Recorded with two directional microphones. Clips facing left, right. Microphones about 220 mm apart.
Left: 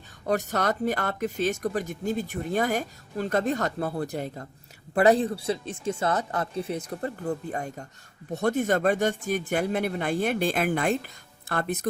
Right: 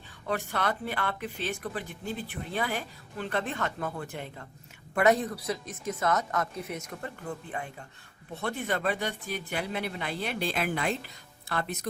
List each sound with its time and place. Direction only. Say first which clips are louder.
0.3 s speech: left 5 dB; 40° left (ahead or behind)